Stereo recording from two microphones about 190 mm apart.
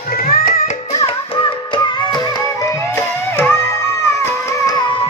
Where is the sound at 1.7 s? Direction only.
20° left (ahead or behind).